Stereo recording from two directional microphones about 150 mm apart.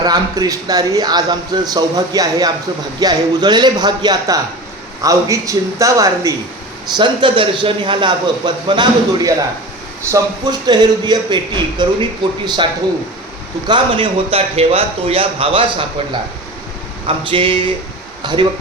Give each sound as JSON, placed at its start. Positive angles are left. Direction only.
{"t": 0.0, "sound": "a man's voice", "side_deg": -25}
{"t": 6.9, "sound": "a man's voice", "side_deg": -30}
{"t": 13.7, "sound": "a man's voice", "side_deg": -35}
{"t": 17.1, "sound": "a man's voice", "side_deg": -35}